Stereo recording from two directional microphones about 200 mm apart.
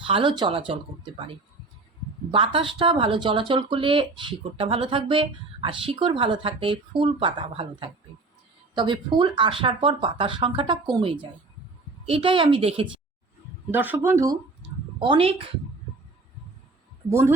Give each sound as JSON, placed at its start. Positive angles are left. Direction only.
{"t": 0.0, "sound": "speech", "side_deg": -25}
{"t": 2.3, "sound": "speech", "side_deg": -25}
{"t": 13.7, "sound": "speech", "side_deg": -10}
{"t": 14.9, "sound": "speech", "side_deg": -25}
{"t": 17.1, "sound": "speech", "side_deg": -10}